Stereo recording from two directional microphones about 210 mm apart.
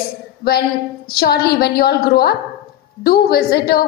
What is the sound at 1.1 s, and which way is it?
A woman's voice, 50° left (ahead or behind).